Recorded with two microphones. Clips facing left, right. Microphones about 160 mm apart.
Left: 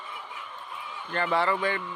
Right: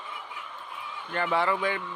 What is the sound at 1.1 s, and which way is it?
Speech, 10° right (ahead or behind).